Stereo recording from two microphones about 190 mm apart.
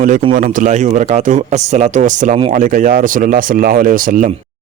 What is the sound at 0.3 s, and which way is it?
Speech, 45° right (ahead or behind).